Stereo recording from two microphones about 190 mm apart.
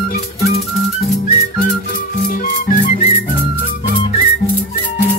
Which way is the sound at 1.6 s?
45° left (ahead or behind).